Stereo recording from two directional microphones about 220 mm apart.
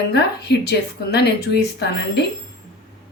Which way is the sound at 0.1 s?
50° left (ahead or behind).